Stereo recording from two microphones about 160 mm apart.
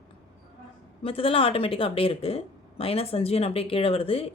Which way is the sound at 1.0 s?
35° left (ahead or behind).